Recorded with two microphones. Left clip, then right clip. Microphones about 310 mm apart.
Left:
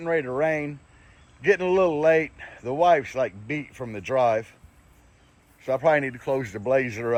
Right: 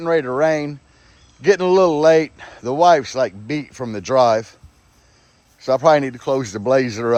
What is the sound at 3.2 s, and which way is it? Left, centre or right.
Speech, right.